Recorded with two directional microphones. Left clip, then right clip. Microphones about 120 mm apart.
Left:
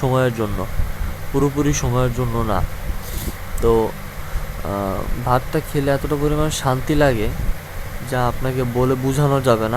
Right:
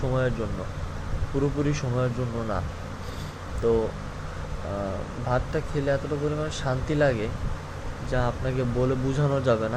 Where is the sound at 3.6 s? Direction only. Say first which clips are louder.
Left 7 dB; 45° left (ahead or behind).